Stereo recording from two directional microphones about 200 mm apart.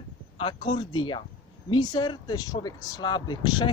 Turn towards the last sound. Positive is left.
turn(degrees=20)  # may be behind; listen again after turning